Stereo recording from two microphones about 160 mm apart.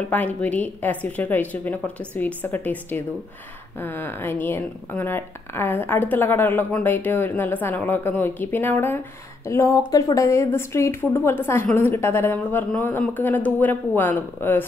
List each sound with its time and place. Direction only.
0.1 s speech: 10° left (ahead or behind)